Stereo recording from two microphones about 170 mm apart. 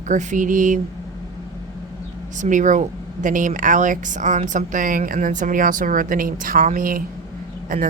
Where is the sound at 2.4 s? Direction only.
50° right (ahead or behind).